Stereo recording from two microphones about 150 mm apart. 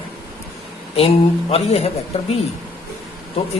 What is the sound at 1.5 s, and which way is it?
Speech, 40° left (ahead or behind).